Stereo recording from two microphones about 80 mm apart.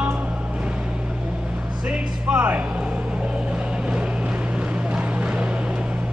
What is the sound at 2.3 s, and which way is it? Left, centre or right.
Speech, right.